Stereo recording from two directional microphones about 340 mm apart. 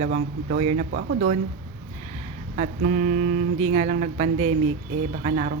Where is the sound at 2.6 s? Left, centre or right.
Right.